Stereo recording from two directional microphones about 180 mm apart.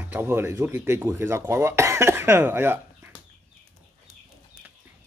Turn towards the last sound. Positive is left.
turn(degrees=-10)  # may be behind; listen again after turning